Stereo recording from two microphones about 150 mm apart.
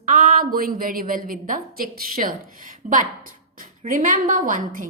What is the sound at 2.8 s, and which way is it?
A woman's voice, 55° right (ahead or behind).